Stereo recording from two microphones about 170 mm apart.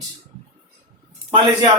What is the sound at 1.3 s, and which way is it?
Speech, 25° right (ahead or behind).